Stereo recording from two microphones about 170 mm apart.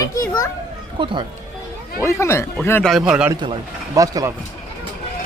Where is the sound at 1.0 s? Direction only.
30° right (ahead or behind).